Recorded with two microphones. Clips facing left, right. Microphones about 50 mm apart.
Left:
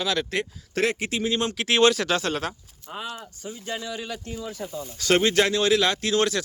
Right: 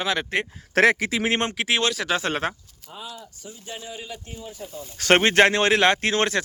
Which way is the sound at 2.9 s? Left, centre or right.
Left.